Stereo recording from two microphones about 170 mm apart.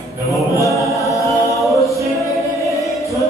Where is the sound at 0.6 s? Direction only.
20° left (ahead or behind).